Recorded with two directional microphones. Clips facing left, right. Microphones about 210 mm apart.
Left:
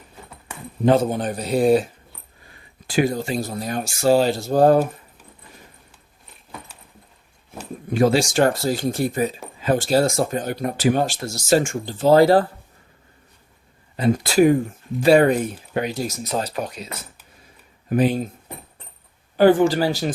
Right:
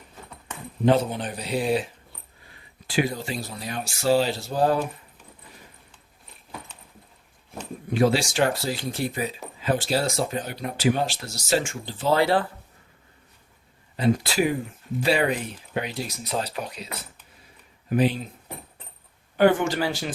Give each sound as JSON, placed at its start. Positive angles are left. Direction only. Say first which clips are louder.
{"t": 0.9, "sound": "speech", "louder": "left 4 dB", "side_deg": 45}
{"t": 7.9, "sound": "speech", "louder": "left 4 dB", "side_deg": 45}
{"t": 13.9, "sound": "speech", "louder": "left 4 dB", "side_deg": 45}
{"t": 19.4, "sound": "speech", "louder": "left 5 dB", "side_deg": 35}